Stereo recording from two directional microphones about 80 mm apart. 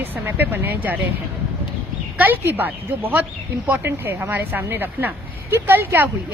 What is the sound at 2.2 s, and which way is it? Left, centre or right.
Speech, right.